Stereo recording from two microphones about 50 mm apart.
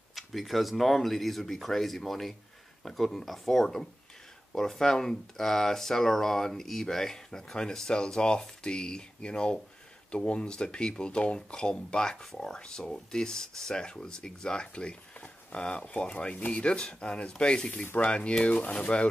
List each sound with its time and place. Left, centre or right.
0.1 s speech: centre; by 19.0 s left